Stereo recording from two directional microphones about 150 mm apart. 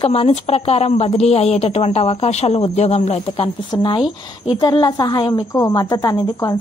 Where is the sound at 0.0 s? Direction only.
40° left (ahead or behind).